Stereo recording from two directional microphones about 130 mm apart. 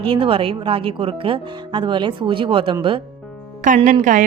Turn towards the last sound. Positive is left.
turn(degrees=-80)